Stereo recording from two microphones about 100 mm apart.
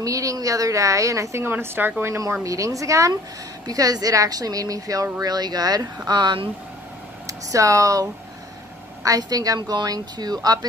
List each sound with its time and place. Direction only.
0.0 s a woman's voice: 35° right (ahead or behind); by 6.5 s 50° right (ahead or behind)
7.2 s a woman's voice: 35° right (ahead or behind)